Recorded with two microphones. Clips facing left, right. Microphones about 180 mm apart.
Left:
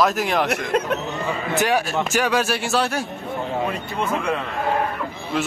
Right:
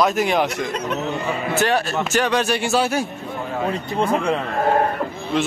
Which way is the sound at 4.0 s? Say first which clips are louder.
Right 4 dB; 35° right (ahead or behind).